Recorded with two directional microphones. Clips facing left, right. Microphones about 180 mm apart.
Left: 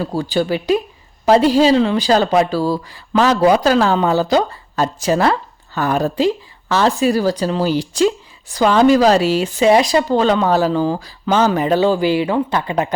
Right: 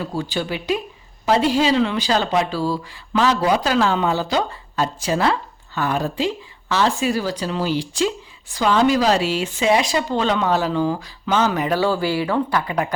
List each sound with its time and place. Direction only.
0.0 s speech: 35° left (ahead or behind)